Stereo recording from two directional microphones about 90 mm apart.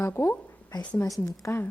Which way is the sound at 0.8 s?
15° left (ahead or behind).